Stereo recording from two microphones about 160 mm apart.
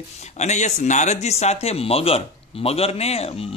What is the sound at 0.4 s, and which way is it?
A man's voice, 45° left (ahead or behind).